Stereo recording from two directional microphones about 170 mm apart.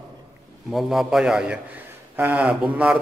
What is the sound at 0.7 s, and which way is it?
A man's voice, centre (ahead or behind).